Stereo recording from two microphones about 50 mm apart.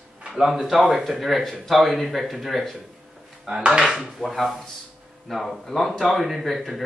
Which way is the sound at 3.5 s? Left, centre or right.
Centre.